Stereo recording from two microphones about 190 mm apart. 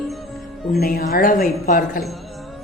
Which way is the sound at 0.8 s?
50° left (ahead or behind).